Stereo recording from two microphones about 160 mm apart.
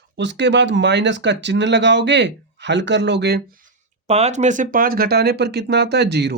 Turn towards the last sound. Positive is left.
turn(degrees=-90)